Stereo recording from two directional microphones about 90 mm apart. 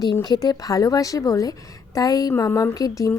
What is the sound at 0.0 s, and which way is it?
Speech, 50° left (ahead or behind).